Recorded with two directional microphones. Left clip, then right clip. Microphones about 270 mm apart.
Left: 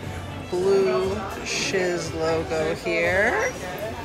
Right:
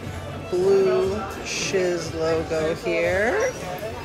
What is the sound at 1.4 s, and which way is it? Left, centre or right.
Speech, centre.